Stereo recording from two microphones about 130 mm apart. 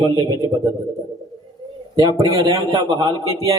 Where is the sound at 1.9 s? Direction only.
30° right (ahead or behind).